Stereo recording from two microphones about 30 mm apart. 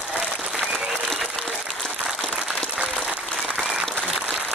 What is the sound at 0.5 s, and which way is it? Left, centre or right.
Applause, centre.